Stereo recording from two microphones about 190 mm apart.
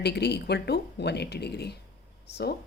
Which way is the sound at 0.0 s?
60° left (ahead or behind).